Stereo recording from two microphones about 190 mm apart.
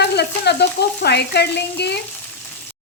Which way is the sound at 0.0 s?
60° left (ahead or behind).